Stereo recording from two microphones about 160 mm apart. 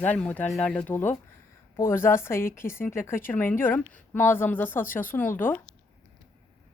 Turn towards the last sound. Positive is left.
turn(degrees=10)  # may be behind; listen again after turning